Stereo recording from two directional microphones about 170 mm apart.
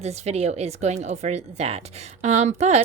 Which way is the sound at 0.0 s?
40° right (ahead or behind).